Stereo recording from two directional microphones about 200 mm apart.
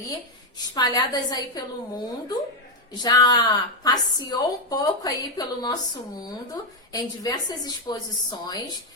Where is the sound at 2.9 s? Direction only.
20° left (ahead or behind).